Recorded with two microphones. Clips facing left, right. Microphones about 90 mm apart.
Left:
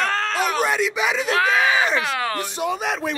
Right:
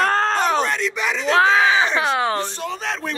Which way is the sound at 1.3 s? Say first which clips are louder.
Right 5 dB; 30° right (ahead or behind).